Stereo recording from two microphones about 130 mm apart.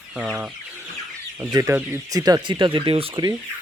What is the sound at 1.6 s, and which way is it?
Speech, 25° right (ahead or behind).